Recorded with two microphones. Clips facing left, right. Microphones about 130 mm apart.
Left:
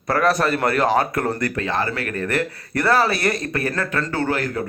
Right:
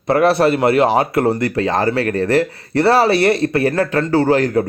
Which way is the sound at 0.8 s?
15° right (ahead or behind).